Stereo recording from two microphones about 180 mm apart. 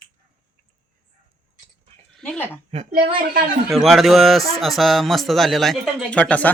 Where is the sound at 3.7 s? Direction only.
Centre (ahead or behind).